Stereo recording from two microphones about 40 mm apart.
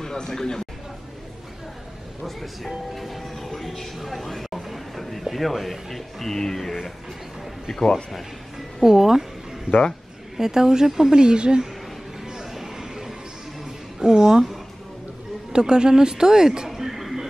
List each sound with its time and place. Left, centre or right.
0.0 s speech: centre
2.2 s speech: centre
2.9 s music: centre
5.2 s speech: centre
8.8 s a woman's voice: centre
9.7 s speech: right
10.3 s a woman's voice: centre
12.3 s a sound: centre
13.9 s speech: centre
15.5 s speech: centre